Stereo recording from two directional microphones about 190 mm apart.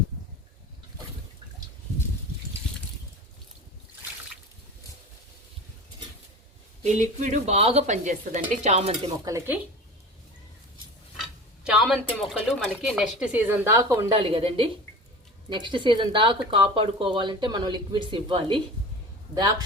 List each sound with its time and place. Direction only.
6.8 s a woman's voice: 40° right (ahead or behind)
11.2 s speech: 5° right (ahead or behind)
14.3 s speech: 30° right (ahead or behind)